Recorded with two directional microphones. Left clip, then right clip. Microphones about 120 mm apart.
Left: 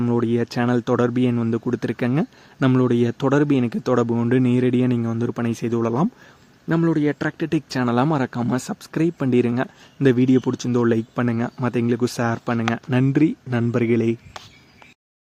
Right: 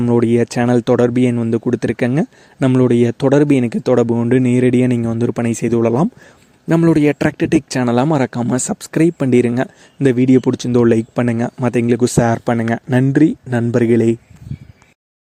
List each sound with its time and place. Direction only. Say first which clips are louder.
0.0 s speech: right 7 dB; 45° right (ahead or behind)
6.7 s speech: right 7 dB; 70° right (ahead or behind); by 14.2 s 35° right (ahead or behind)